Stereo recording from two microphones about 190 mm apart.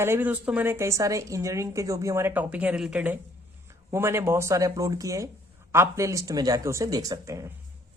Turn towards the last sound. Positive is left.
turn(degrees=-15)  # may be behind; listen again after turning